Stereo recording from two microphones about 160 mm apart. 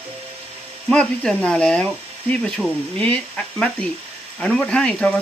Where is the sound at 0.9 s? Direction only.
5° left (ahead or behind).